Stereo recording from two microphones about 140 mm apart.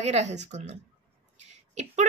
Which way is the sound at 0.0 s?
55° right (ahead or behind).